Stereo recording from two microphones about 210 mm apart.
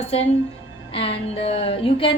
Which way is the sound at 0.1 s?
30° left (ahead or behind).